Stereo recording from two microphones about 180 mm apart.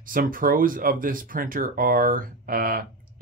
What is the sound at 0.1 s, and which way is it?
Speech, 50° right (ahead or behind).